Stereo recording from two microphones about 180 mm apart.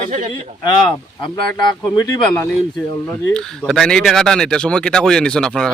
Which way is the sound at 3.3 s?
5° left (ahead or behind).